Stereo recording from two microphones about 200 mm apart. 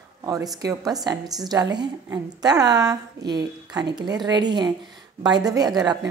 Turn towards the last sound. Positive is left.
turn(degrees=-20)  # may be behind; listen again after turning